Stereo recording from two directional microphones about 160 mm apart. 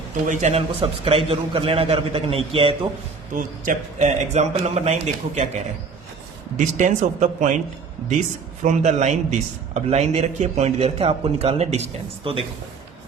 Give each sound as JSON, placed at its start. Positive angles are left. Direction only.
{"t": 0.3, "sound": "a man's voice", "side_deg": -45}
{"t": 3.3, "sound": "a man's voice", "side_deg": -50}
{"t": 8.6, "sound": "a man's voice", "side_deg": -45}